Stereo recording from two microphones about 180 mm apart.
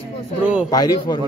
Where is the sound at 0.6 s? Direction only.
20° left (ahead or behind).